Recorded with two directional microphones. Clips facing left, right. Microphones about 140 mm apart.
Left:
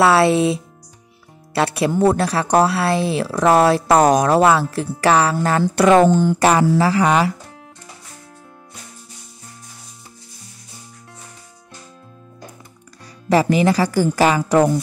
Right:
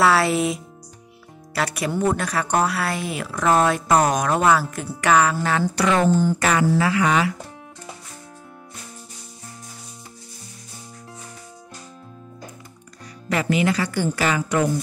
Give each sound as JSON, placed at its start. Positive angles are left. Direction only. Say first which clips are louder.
{"t": 0.0, "sound": "speech", "louder": "left 5 dB", "side_deg": 25}
{"t": 6.0, "sound": "speech", "louder": "left 3 dB", "side_deg": 75}
{"t": 6.4, "sound": "speech", "louder": "left 5 dB", "side_deg": 35}
{"t": 13.3, "sound": "speech", "louder": "left 6 dB", "side_deg": 35}